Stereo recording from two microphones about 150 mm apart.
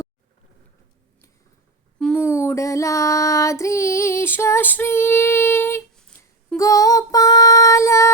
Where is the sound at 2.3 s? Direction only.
20° left (ahead or behind).